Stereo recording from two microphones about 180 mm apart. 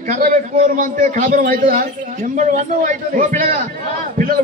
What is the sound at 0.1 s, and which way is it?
A man's voice, 45° right (ahead or behind).